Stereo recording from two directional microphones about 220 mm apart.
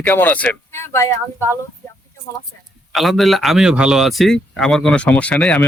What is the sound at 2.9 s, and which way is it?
A man's voice, centre (ahead or behind).